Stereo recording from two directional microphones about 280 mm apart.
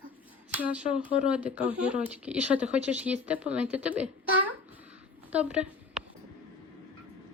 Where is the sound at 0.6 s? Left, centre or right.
Centre.